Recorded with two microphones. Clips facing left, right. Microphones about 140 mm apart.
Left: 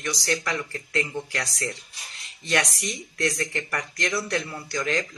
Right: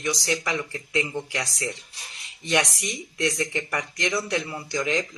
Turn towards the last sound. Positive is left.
turn(degrees=-15)  # may be behind; listen again after turning